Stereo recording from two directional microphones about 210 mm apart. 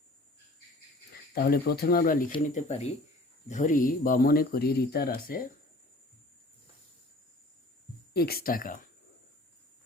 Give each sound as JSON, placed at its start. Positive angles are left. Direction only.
{"t": 1.3, "sound": "speech", "side_deg": 45}
{"t": 2.6, "sound": "speech", "side_deg": 30}
{"t": 8.1, "sound": "speech", "side_deg": 45}